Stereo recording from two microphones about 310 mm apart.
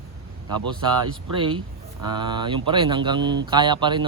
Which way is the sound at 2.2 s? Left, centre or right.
Centre.